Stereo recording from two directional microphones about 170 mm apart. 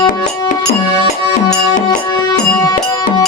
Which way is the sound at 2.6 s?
20° left (ahead or behind).